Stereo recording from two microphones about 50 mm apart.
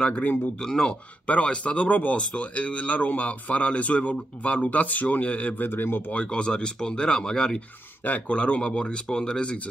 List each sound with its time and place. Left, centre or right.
0.6 s speech: centre
1.2 s speech: left
5.6 s speech: left
6.1 s speech: left
8.0 s speech: left